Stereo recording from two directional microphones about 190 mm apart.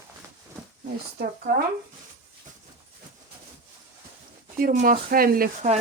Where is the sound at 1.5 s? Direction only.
50° right (ahead or behind).